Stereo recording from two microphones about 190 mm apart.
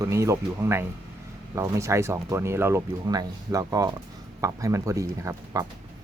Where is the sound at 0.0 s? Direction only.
15° right (ahead or behind).